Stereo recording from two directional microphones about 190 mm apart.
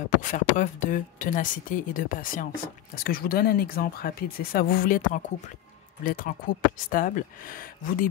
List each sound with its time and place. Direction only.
0.2 s speech: 40° left (ahead or behind)